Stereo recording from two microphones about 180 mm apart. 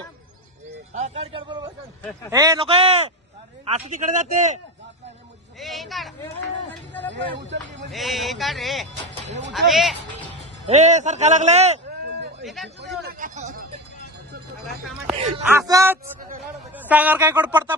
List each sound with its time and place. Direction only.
0.9 s a man's voice: 40° right (ahead or behind); by 2.6 s 20° right (ahead or behind)
2.6 s a man's voice: 35° right (ahead or behind)
3.8 s a man's voice: 45° right (ahead or behind)
5.5 s speech: centre (ahead or behind)
6.2 s speech: 10° left (ahead or behind)
7.1 s speech: 75° right (ahead or behind)
7.9 s speech: centre (ahead or behind)
10.7 s a man's voice: 40° right (ahead or behind)
12.4 s speech: centre (ahead or behind)
13.1 s a sound: 45° right (ahead or behind)
15.5 s a man's voice: 15° right (ahead or behind)